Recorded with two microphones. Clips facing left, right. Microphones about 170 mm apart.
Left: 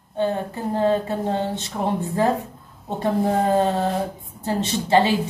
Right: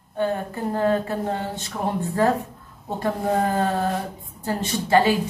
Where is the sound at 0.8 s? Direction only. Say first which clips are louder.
Left 2 dB; 25° left (ahead or behind).